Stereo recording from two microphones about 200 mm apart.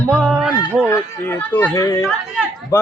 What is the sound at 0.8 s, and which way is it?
Speech, 10° left (ahead or behind).